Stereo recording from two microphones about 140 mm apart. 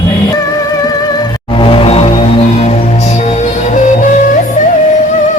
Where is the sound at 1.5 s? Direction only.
40° left (ahead or behind); by 4.1 s 60° left (ahead or behind).